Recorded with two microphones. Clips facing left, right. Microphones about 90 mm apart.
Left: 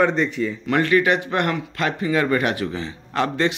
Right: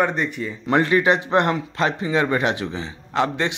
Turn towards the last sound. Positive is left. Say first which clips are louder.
# left 1 dB
turn(degrees=-15)  # may be behind; listen again after turning